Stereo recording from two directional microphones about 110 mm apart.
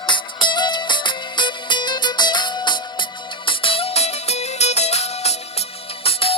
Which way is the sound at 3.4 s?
55° left (ahead or behind).